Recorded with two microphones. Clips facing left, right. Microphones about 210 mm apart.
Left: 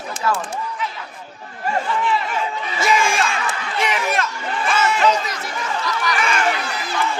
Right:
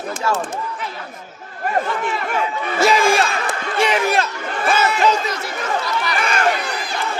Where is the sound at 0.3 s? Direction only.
25° right (ahead or behind).